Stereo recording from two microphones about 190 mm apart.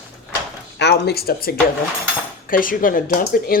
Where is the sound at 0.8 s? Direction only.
60° left (ahead or behind).